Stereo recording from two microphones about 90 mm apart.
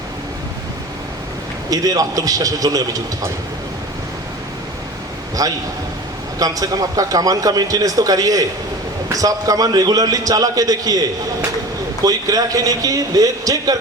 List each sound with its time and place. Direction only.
1.7 s a man's voice: 45° right (ahead or behind)
5.4 s a man's voice: 40° right (ahead or behind)
12.0 s a man's voice: 45° right (ahead or behind)